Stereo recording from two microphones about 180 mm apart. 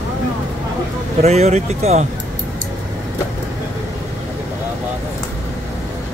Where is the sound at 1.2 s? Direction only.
35° right (ahead or behind).